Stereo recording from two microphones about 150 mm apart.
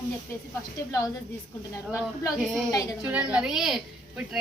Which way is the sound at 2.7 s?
20° left (ahead or behind).